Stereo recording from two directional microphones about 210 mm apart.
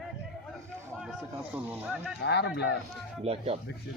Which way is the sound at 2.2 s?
55° left (ahead or behind).